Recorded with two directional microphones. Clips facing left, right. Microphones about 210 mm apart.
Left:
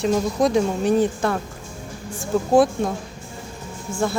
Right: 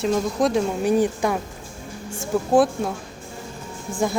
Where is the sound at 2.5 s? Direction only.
5° right (ahead or behind).